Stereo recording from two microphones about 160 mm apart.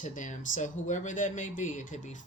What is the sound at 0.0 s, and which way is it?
Speech, 55° left (ahead or behind).